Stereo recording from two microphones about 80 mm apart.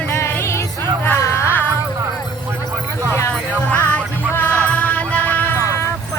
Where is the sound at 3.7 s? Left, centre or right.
Left.